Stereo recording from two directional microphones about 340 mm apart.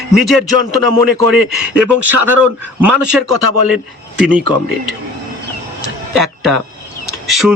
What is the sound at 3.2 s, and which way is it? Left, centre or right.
Speech, right.